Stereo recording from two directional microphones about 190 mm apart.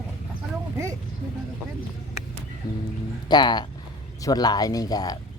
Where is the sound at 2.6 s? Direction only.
20° left (ahead or behind).